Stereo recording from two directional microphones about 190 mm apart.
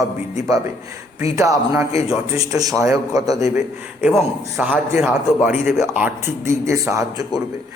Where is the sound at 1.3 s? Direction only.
15° right (ahead or behind).